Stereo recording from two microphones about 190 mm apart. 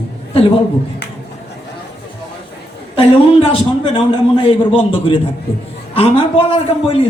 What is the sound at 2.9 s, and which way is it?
A man's voice, 30° left (ahead or behind).